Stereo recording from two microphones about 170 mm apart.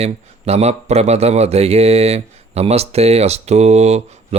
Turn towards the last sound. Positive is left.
turn(degrees=-40)  # may be behind; listen again after turning